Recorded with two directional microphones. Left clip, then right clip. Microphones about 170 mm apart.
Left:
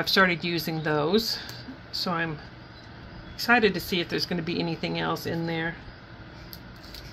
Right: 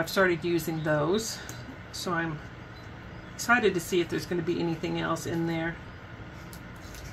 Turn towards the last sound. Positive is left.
turn(degrees=45)  # may be behind; listen again after turning